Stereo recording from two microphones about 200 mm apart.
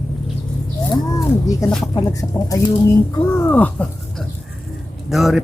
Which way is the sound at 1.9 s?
15° left (ahead or behind).